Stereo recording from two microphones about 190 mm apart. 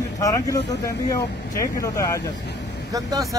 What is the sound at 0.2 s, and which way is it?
Speech, 15° left (ahead or behind).